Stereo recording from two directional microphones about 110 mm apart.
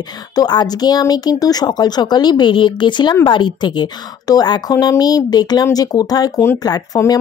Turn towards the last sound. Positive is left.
turn(degrees=35)  # may be behind; listen again after turning